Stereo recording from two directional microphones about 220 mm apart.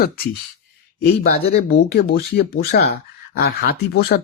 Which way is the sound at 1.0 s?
45° left (ahead or behind).